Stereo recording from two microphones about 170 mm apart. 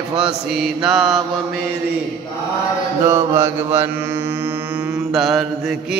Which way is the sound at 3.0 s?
15° right (ahead or behind).